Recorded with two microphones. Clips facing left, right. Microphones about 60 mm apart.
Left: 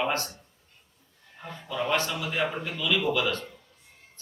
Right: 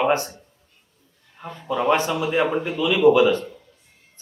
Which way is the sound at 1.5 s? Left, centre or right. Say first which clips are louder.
Right 8 dB; right.